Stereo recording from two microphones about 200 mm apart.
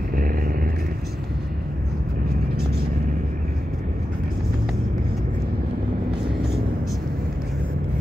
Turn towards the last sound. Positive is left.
turn(degrees=-55)  # may be behind; listen again after turning